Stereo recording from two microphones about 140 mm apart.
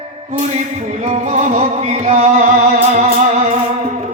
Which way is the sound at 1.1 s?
60° right (ahead or behind).